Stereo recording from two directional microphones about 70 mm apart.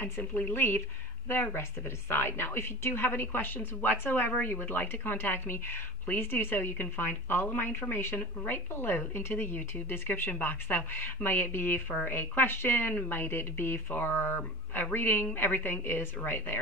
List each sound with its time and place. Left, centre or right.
0.0 s speech: left